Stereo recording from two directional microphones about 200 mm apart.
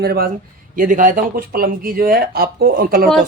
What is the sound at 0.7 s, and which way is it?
Speech, 40° right (ahead or behind).